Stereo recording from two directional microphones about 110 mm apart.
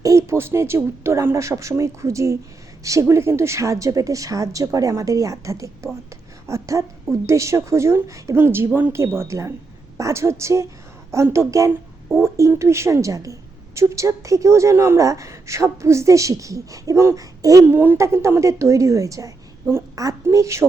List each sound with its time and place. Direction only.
0.0 s a sound: 25° right (ahead or behind)
0.8 s a woman's voice: 25° right (ahead or behind)
12.0 s speech: 15° right (ahead or behind)
12.4 s a woman's voice: 25° right (ahead or behind)